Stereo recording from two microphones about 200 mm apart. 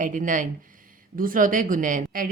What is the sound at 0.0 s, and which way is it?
A woman's voice, 40° right (ahead or behind).